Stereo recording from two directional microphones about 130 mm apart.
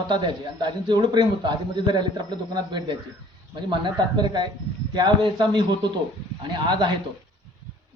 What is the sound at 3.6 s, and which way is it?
A man's voice, 35° right (ahead or behind).